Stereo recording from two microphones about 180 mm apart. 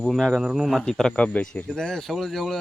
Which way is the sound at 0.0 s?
Centre (ahead or behind).